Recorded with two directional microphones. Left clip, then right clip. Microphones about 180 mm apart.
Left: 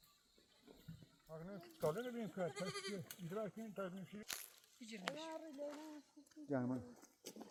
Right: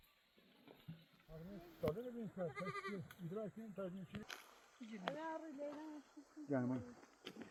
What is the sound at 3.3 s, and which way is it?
Speech, 50° right (ahead or behind).